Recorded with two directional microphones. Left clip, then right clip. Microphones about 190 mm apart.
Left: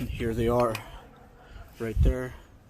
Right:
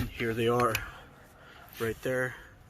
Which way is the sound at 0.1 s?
15° left (ahead or behind).